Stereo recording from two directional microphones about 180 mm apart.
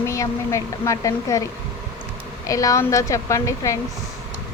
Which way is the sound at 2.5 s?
20° left (ahead or behind).